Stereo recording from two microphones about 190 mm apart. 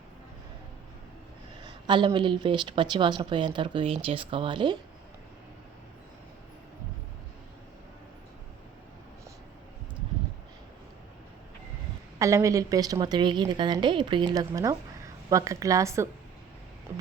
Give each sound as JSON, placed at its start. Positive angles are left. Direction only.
{"t": 1.6, "sound": "a woman's voice", "side_deg": -25}
{"t": 12.2, "sound": "a woman's voice", "side_deg": -15}